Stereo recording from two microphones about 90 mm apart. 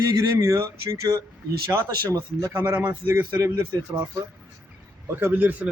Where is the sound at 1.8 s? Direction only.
25° right (ahead or behind).